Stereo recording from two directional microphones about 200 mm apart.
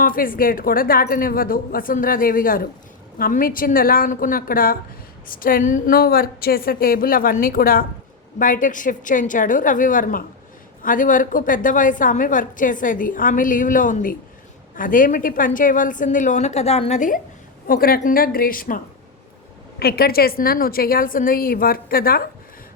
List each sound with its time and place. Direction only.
0.0 s a woman's voice: 45° left (ahead or behind)
17.7 s a woman's voice: 45° left (ahead or behind)
19.8 s a woman's voice: 50° left (ahead or behind)